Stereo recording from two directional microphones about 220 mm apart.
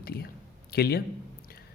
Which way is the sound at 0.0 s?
45° left (ahead or behind).